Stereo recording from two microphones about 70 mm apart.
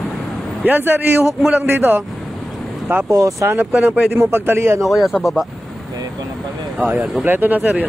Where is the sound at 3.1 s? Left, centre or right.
Right.